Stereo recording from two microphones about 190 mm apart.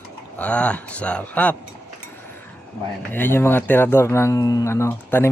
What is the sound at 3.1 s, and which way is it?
Speech, 10° left (ahead or behind).